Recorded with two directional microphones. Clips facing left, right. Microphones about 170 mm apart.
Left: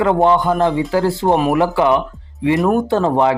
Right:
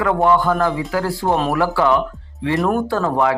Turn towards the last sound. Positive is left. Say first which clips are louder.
# left 3 dB
turn(degrees=25)  # may be behind; listen again after turning